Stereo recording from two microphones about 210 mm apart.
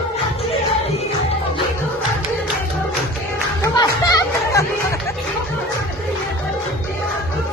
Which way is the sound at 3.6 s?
15° left (ahead or behind).